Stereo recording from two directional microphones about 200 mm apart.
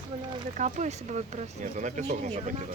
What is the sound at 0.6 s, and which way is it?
Speech, 35° right (ahead or behind).